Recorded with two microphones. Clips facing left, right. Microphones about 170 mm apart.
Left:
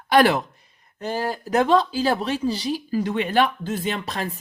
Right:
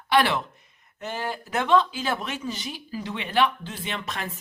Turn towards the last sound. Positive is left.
turn(degrees=35)  # may be behind; listen again after turning